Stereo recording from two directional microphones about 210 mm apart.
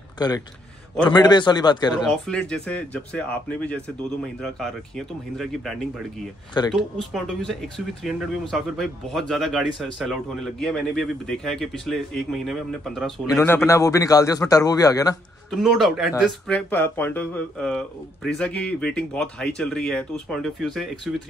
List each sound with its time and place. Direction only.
1.0 s a man's voice: 20° left (ahead or behind)
2.0 s a man's voice: 5° left (ahead or behind)
15.6 s speech: centre (ahead or behind)
16.4 s speech: 5° left (ahead or behind)